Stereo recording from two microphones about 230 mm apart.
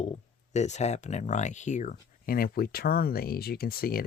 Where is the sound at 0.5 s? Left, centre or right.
Left.